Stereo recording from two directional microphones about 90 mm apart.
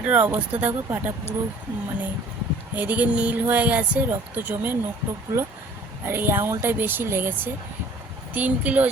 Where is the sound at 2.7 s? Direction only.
20° right (ahead or behind).